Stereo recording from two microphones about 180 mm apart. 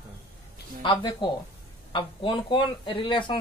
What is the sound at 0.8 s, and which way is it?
Speech, 25° left (ahead or behind).